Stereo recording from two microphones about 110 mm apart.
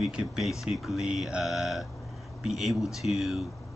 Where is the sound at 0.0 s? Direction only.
5° right (ahead or behind).